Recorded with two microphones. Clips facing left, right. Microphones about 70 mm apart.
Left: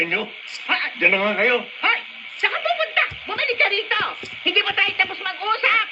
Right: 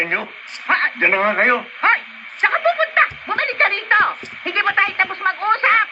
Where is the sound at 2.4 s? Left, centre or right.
Right.